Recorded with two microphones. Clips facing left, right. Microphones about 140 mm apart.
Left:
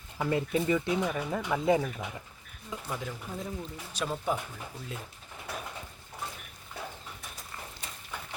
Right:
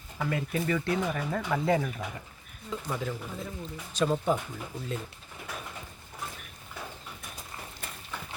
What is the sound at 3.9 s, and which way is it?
Speech, 10° left (ahead or behind).